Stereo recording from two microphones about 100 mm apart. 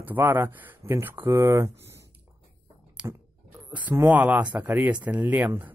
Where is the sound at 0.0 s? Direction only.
20° right (ahead or behind).